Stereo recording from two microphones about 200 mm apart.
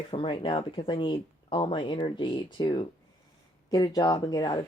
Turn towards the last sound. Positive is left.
turn(degrees=20)  # may be behind; listen again after turning